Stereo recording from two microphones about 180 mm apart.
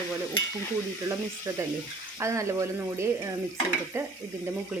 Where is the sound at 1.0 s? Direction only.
15° right (ahead or behind).